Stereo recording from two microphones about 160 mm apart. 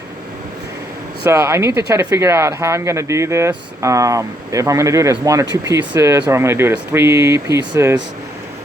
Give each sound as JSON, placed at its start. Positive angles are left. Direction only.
{"t": 1.3, "sound": "speech", "side_deg": -20}